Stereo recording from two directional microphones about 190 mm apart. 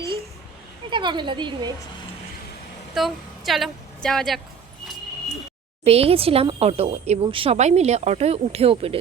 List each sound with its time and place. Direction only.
0.9 s a woman's voice: 25° right (ahead or behind)
2.9 s a woman's voice: centre (ahead or behind)
5.8 s speech: 30° right (ahead or behind)